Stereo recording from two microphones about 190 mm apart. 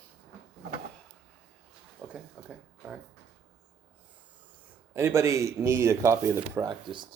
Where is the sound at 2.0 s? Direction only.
5° right (ahead or behind).